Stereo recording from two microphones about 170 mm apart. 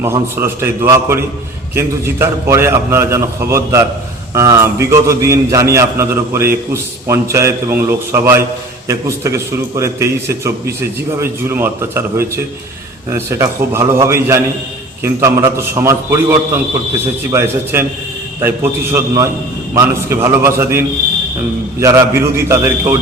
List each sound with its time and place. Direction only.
0.0 s a man's voice: 15° right (ahead or behind)